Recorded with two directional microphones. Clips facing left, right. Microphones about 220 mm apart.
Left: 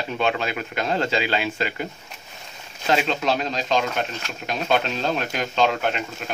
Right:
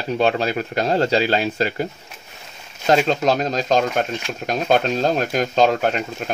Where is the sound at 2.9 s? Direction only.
40° right (ahead or behind).